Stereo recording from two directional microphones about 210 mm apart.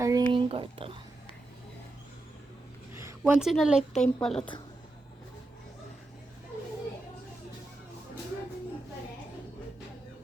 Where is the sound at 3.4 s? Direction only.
Centre (ahead or behind).